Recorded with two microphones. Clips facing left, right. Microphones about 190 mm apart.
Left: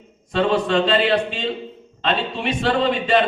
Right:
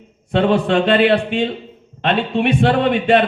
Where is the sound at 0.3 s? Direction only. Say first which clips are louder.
Right 4 dB; 60° right (ahead or behind).